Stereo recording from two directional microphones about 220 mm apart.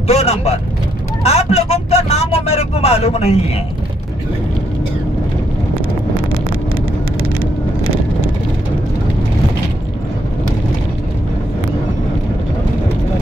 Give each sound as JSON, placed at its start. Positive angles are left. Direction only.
{"t": 0.1, "sound": "speech", "side_deg": 30}
{"t": 5.8, "sound": "vehicle", "side_deg": -40}